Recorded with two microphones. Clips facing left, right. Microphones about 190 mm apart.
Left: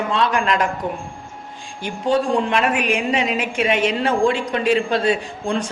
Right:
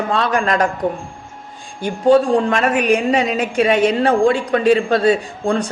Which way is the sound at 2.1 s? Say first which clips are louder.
Right 6 dB; 40° right (ahead or behind).